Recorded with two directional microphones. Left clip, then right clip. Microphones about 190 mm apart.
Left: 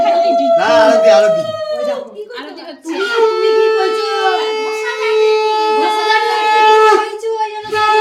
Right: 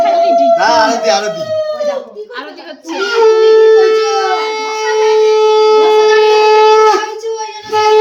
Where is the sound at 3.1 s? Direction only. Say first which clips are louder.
Right 5 dB; 35° right (ahead or behind).